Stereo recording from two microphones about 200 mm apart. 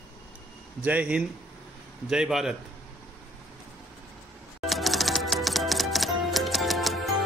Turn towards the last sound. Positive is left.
turn(degrees=0)  # may be behind; listen again after turning